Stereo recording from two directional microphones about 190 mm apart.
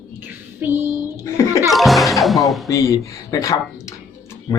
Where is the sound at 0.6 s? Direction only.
10° right (ahead or behind).